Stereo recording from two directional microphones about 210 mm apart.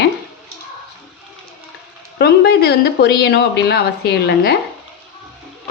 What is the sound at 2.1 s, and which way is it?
Speech, 50° left (ahead or behind).